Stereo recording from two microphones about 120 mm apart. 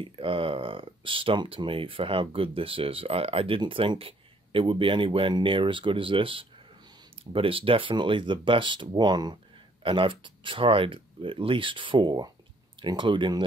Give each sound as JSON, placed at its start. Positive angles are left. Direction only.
{"t": 0.0, "sound": "speech", "side_deg": -50}